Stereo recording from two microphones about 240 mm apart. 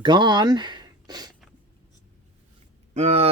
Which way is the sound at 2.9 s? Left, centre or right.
Right.